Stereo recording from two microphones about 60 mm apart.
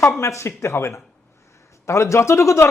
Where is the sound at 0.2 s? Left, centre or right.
Left.